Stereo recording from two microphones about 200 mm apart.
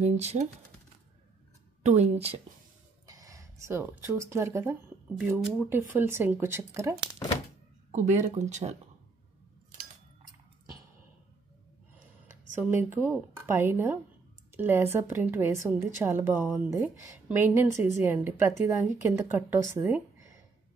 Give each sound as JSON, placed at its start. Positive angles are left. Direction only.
{"t": 0.0, "sound": "speech", "side_deg": -35}
{"t": 1.8, "sound": "speech", "side_deg": -35}
{"t": 3.1, "sound": "speech", "side_deg": -15}
{"t": 7.9, "sound": "speech", "side_deg": -35}
{"t": 12.6, "sound": "speech", "side_deg": -10}